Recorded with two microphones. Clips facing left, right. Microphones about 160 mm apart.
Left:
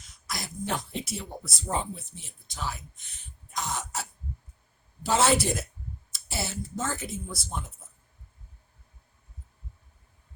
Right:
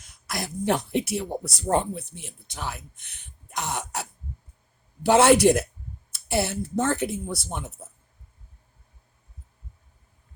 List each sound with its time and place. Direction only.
0.3 s speech: 60° right (ahead or behind)
3.5 s throat clearing: 65° right (ahead or behind)
5.0 s speech: 60° right (ahead or behind)